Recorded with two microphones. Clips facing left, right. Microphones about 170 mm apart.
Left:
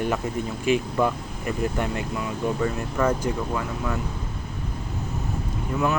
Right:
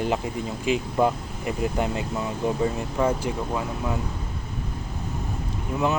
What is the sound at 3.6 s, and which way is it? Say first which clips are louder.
Speech: even; 20° right (ahead or behind).